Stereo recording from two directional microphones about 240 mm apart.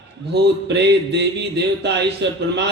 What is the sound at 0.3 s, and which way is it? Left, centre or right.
A man's voice, right.